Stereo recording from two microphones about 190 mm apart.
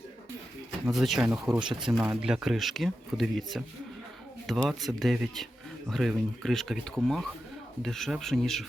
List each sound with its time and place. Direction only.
0.9 s speech: centre (ahead or behind)
4.7 s speech: centre (ahead or behind)